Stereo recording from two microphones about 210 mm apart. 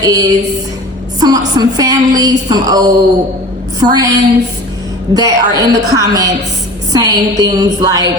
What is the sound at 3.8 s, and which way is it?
Speech, 20° right (ahead or behind).